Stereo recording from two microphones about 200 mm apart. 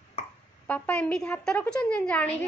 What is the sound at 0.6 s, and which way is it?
A woman's voice, 5° left (ahead or behind).